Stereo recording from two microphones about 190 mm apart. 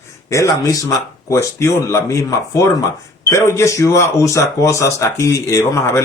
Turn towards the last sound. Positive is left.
turn(degrees=15)  # may be behind; listen again after turning